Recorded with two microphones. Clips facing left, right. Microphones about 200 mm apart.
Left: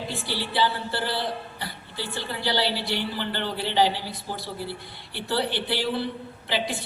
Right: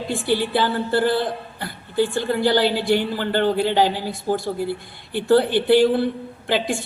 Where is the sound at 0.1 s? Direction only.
50° right (ahead or behind).